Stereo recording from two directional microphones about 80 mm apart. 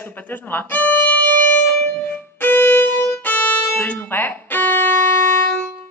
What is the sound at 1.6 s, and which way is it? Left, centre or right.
Music, left.